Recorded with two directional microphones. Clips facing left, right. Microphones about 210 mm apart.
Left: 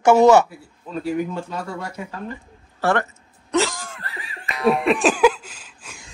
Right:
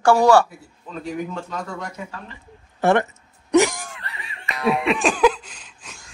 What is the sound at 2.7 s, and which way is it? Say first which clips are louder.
Throat clearing: right 3 dB; 20° right (ahead or behind).